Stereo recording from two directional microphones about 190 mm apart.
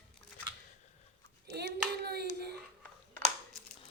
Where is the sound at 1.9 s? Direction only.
55° right (ahead or behind).